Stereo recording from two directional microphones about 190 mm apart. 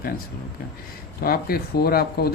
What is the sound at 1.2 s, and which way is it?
Speech, 55° left (ahead or behind).